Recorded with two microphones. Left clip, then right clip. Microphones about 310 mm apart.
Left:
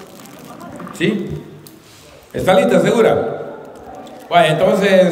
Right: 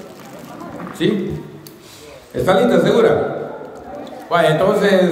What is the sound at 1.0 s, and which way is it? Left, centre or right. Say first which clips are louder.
Speech: even; centre.